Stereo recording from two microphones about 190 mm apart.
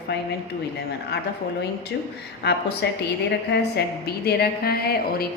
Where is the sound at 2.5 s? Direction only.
60° left (ahead or behind).